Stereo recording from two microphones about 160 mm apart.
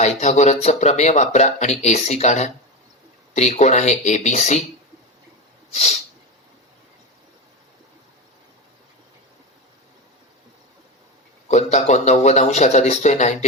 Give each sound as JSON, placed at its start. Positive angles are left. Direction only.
{"t": 0.0, "sound": "speech", "side_deg": 45}
{"t": 5.7, "sound": "speech", "side_deg": 45}
{"t": 11.4, "sound": "speech", "side_deg": 45}